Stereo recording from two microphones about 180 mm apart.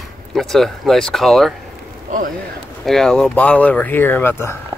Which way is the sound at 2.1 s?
45° right (ahead or behind).